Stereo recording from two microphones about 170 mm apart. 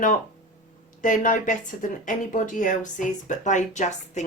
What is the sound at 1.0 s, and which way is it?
Speech, 50° left (ahead or behind).